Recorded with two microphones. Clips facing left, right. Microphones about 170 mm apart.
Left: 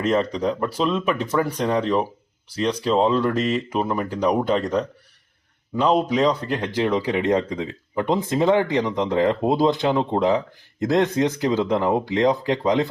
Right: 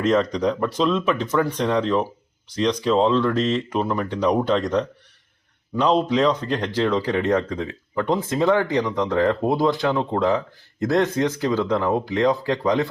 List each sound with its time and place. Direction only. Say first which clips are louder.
0.0 s speech: right 1 dB; 5° left (ahead or behind)